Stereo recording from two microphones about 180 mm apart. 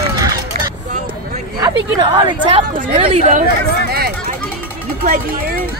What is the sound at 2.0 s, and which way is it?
Speech, 25° right (ahead or behind).